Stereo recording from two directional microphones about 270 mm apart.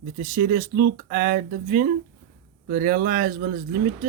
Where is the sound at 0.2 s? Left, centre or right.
Right.